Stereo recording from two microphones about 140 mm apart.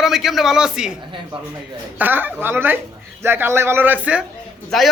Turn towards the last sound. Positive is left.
turn(degrees=0)  # may be behind; listen again after turning